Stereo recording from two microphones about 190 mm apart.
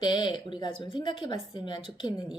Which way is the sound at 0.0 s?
25° left (ahead or behind).